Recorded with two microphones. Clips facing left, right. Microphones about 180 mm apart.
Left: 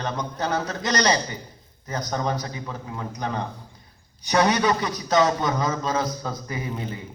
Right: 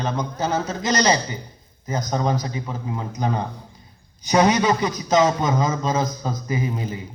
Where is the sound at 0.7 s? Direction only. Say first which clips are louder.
Right 3 dB; 10° right (ahead or behind).